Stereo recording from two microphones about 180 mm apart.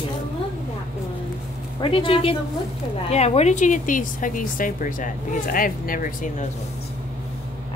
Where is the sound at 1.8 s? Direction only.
30° left (ahead or behind); by 6.4 s 50° left (ahead or behind).